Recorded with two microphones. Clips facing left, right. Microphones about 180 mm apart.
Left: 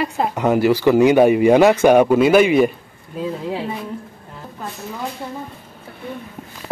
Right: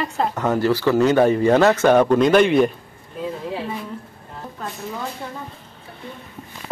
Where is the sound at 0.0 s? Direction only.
10° left (ahead or behind).